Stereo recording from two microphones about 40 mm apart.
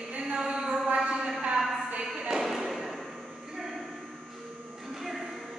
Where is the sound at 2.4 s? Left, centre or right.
Centre.